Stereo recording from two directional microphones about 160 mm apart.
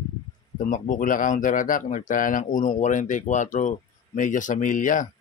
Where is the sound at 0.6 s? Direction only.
55° left (ahead or behind).